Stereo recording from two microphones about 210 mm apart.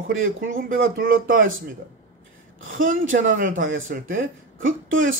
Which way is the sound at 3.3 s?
40° right (ahead or behind).